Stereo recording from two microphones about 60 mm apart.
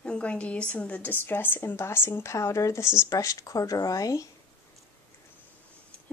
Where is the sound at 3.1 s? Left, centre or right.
Left.